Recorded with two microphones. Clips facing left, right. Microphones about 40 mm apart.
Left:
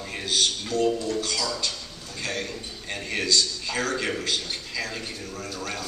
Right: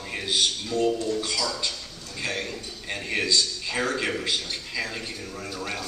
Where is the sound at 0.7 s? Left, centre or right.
Centre.